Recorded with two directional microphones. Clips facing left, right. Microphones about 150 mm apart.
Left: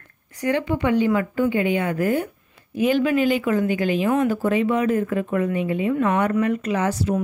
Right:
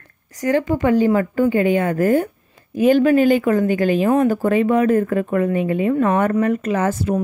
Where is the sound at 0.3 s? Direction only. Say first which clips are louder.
Right 4 dB; 40° right (ahead or behind).